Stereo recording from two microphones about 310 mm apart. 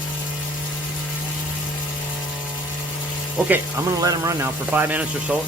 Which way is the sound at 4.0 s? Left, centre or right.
Centre.